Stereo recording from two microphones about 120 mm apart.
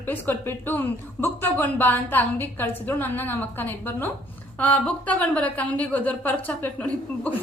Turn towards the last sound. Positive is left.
turn(degrees=10)  # may be behind; listen again after turning